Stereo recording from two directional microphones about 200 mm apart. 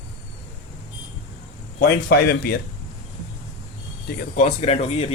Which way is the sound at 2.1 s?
50° left (ahead or behind).